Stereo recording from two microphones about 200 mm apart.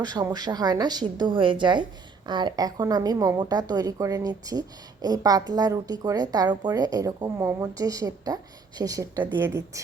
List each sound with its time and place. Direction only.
0.0 s speech: 20° right (ahead or behind)